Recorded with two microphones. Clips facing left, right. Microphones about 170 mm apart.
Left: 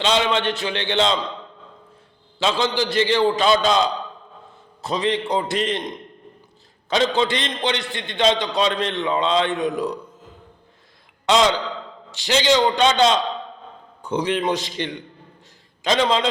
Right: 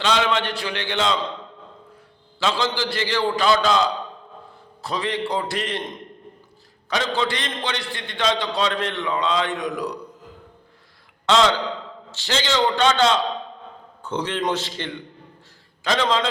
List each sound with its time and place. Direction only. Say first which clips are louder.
0.0 s a man's voice: left 1 dB; 20° left (ahead or behind)
2.4 s a man's voice: left 2 dB; 20° left (ahead or behind)
6.9 s a man's voice: left 4 dB; 20° left (ahead or behind)
11.3 s a man's voice: left 1 dB; 15° left (ahead or behind)